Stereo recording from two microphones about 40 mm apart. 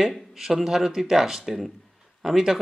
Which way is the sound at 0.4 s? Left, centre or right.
Centre.